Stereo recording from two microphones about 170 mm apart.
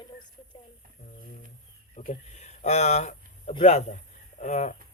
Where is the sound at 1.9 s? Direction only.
45° left (ahead or behind).